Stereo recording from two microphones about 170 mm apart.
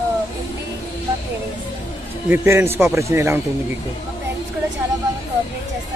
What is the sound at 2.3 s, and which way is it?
A man's voice, 15° right (ahead or behind).